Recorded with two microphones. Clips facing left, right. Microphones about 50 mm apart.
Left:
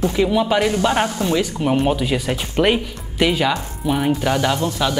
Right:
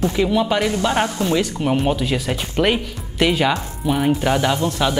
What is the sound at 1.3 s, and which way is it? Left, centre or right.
Speech, centre.